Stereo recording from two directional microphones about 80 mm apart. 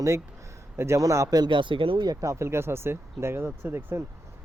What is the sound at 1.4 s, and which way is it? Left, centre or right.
Speech, right.